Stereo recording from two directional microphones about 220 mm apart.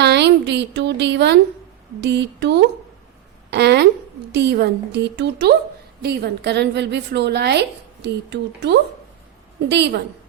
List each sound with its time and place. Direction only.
0.0 s a woman's voice: 50° right (ahead or behind)